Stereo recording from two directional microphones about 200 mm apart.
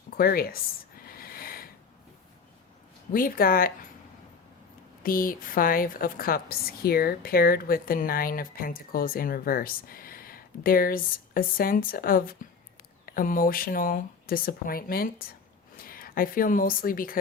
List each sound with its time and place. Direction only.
0.1 s a woman's voice: 50° left (ahead or behind)
1.0 s a sound: 45° left (ahead or behind)
3.1 s a woman's voice: 45° left (ahead or behind)
5.0 s a woman's voice: 45° left (ahead or behind)